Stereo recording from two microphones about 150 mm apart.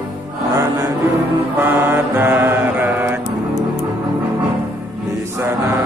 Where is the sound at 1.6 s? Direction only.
10° right (ahead or behind).